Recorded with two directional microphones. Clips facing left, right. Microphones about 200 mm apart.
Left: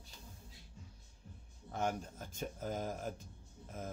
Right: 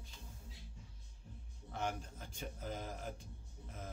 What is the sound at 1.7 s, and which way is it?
Speech, 45° left (ahead or behind).